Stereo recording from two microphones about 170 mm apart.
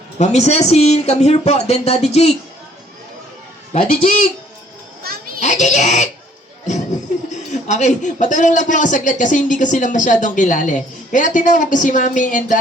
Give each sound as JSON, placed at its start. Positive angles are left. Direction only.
{"t": 0.2, "sound": "speech", "side_deg": 40}
{"t": 3.7, "sound": "a man's voice", "side_deg": 50}
{"t": 5.4, "sound": "speech", "side_deg": 45}
{"t": 7.3, "sound": "a man's voice", "side_deg": 45}